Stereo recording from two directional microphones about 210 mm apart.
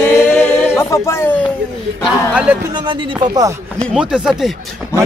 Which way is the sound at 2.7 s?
20° right (ahead or behind).